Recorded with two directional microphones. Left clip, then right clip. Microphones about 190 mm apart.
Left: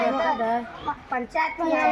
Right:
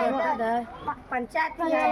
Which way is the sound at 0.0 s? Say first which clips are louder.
Left 2 dB; 20° right (ahead or behind).